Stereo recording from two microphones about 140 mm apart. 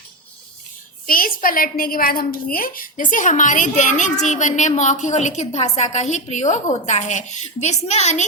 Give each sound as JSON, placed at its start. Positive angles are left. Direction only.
{"t": 1.0, "sound": "a woman's voice", "side_deg": 90}